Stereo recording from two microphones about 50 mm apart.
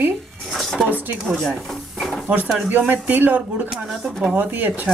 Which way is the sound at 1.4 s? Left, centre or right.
Centre.